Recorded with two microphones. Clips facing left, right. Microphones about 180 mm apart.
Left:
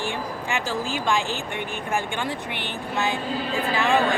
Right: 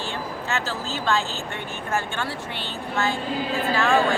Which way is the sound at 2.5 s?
15° left (ahead or behind).